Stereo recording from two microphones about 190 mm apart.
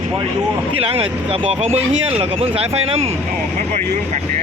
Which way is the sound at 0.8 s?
30° right (ahead or behind).